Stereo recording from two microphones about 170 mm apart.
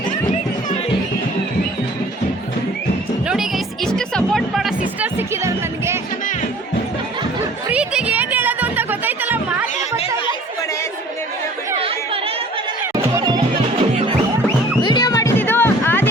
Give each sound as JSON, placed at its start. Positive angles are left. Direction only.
{"t": 3.2, "sound": "music", "side_deg": 0}
{"t": 4.9, "sound": "music", "side_deg": -15}
{"t": 7.7, "sound": "a sound", "side_deg": -5}
{"t": 11.8, "sound": "chatter", "side_deg": -35}
{"t": 13.0, "sound": "music", "side_deg": -20}
{"t": 14.8, "sound": "music", "side_deg": 25}